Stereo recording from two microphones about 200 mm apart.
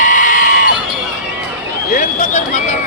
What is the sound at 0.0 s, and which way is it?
Sheep, 40° left (ahead or behind).